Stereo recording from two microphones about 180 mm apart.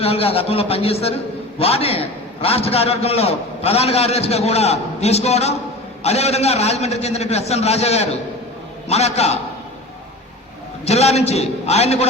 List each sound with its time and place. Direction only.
0.0 s a man's voice: 35° left (ahead or behind)
10.8 s a man's voice: 35° left (ahead or behind)